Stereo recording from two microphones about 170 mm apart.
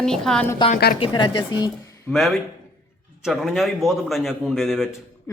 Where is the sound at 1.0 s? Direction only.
30° left (ahead or behind).